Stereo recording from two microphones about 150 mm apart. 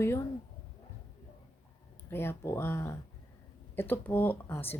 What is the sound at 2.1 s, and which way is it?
Speech, 15° left (ahead or behind).